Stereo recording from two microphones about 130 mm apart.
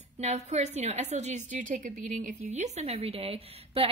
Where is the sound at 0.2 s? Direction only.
55° right (ahead or behind).